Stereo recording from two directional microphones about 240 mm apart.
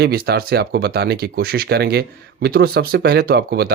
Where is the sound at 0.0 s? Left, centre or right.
Right.